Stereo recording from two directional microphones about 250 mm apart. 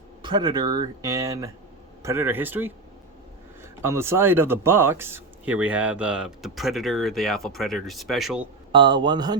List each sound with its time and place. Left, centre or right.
0.2 s speech: centre
8.7 s speech: centre